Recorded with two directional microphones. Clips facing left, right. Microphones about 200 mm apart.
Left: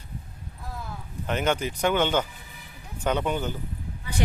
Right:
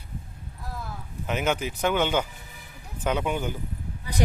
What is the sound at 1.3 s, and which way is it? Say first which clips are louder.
A man's voice: left 1 dB; 5° right (ahead or behind).